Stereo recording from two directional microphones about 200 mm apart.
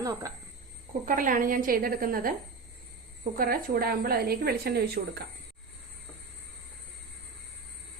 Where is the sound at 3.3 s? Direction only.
45° right (ahead or behind).